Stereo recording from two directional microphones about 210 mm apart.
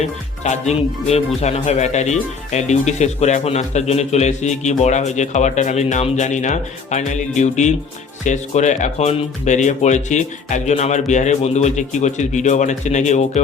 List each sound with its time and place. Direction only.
0.4 s speech: 30° left (ahead or behind)